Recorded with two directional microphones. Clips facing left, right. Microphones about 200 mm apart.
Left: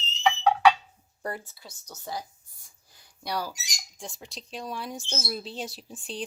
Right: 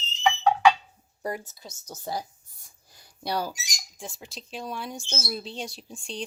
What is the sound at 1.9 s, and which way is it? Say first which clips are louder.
Speech: right 3 dB; 35° right (ahead or behind).